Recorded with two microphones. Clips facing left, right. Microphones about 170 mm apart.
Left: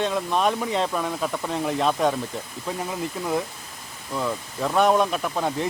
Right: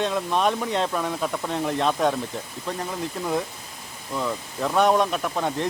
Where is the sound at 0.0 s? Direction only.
Centre (ahead or behind).